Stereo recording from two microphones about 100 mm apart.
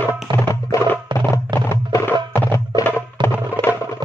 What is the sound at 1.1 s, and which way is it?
Music, 50° right (ahead or behind).